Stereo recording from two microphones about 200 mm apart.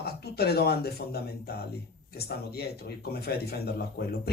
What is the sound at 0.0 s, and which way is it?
Speech, 50° left (ahead or behind).